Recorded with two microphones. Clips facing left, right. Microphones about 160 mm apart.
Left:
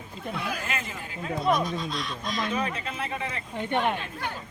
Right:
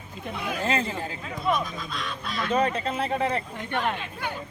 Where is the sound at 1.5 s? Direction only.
35° left (ahead or behind).